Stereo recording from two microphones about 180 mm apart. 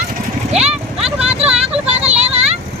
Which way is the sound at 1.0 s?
5° right (ahead or behind).